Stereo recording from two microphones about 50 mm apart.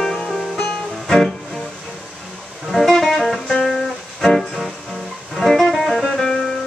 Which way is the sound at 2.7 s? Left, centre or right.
Centre.